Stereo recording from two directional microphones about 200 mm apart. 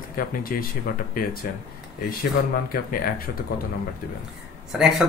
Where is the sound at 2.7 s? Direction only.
45° left (ahead or behind).